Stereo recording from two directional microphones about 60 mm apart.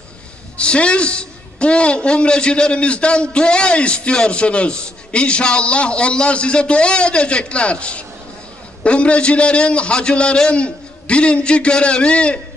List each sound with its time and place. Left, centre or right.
0.6 s a man's voice: centre